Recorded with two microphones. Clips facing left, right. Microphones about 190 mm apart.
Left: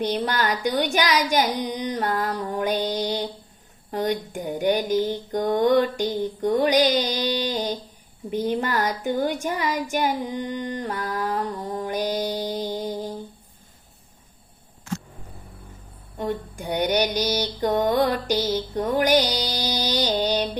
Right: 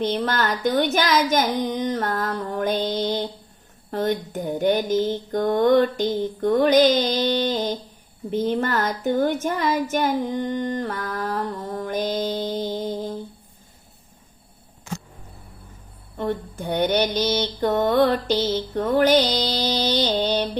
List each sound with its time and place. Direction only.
0.0 s mantra: 15° left (ahead or behind)
10.4 s mantra: 50° right (ahead or behind)
10.8 s music: 15° left (ahead or behind)
16.1 s mantra: 15° left (ahead or behind)